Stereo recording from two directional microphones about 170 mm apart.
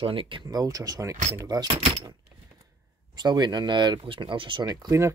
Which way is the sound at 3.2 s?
25° right (ahead or behind).